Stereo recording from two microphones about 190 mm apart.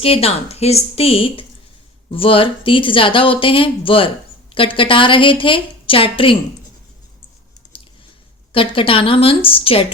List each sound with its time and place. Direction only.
0.0 s a woman's voice: 30° left (ahead or behind)
7.7 s chewing: 30° left (ahead or behind)
8.5 s speech: 30° left (ahead or behind)